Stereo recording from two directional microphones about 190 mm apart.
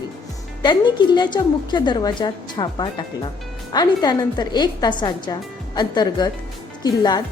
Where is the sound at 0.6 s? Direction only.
25° left (ahead or behind).